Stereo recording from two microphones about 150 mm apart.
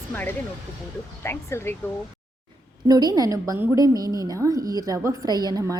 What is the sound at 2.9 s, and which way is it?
A woman's voice, 25° right (ahead or behind).